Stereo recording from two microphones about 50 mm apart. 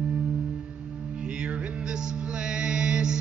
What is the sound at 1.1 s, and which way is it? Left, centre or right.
Music, centre.